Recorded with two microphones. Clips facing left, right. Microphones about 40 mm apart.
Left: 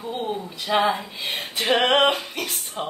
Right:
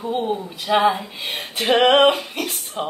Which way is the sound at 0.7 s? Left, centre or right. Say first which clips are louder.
Right 4 dB; centre.